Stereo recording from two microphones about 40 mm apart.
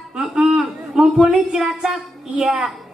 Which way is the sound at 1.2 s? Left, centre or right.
Right.